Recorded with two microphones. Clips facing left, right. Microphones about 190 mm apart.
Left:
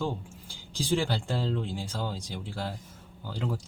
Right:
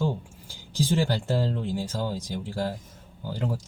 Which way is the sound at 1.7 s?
40° right (ahead or behind).